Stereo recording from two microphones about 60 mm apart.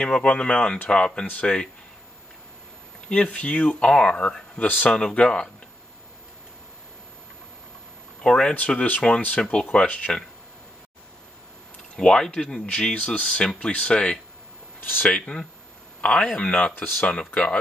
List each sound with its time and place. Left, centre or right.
0.0 s speech: centre
3.1 s speech: left
8.2 s speech: centre
12.0 s speech: centre
14.8 s speech: left
15.0 s speech: centre